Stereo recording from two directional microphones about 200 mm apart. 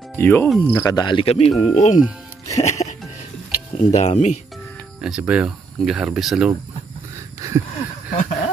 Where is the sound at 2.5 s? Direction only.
35° left (ahead or behind).